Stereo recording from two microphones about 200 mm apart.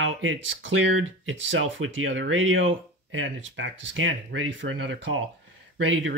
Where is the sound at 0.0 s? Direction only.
75° right (ahead or behind).